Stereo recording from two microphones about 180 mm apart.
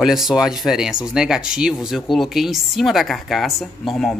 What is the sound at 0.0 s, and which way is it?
A woman's voice, centre (ahead or behind).